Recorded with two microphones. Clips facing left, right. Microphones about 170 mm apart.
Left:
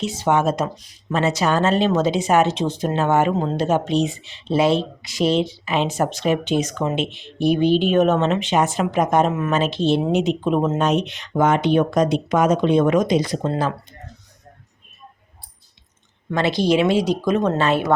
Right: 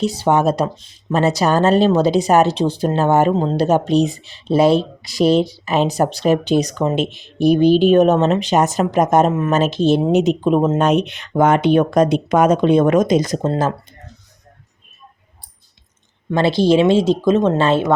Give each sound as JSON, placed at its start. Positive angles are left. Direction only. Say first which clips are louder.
{"t": 0.0, "sound": "speech", "louder": "right 3 dB", "side_deg": -35}
{"t": 16.3, "sound": "speech", "louder": "right 4 dB", "side_deg": -30}